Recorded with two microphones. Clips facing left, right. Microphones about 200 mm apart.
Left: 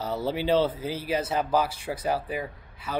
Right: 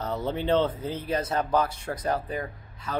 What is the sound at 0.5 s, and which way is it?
Speech, 5° left (ahead or behind).